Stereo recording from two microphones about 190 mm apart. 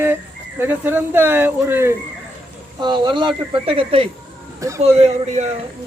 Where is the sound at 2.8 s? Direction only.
25° right (ahead or behind).